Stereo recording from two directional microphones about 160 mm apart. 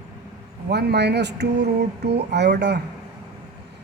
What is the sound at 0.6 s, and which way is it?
Speech, 90° right.